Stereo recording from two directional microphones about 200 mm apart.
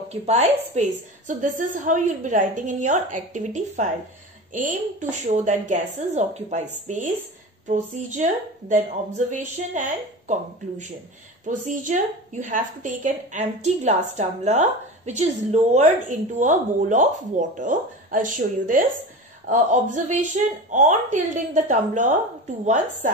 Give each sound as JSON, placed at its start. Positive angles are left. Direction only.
{"t": 0.1, "sound": "a woman's voice", "side_deg": -35}